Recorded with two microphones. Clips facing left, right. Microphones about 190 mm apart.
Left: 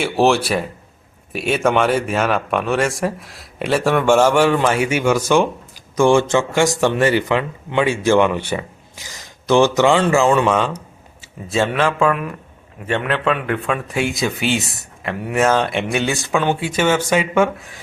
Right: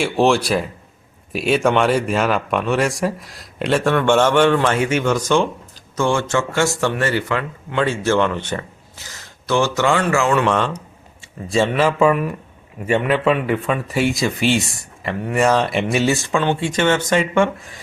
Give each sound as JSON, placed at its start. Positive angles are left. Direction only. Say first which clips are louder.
{"t": 0.0, "sound": "a man's voice", "louder": "even", "side_deg": 0}
{"t": 10.5, "sound": "a man's voice", "louder": "left 1 dB", "side_deg": 5}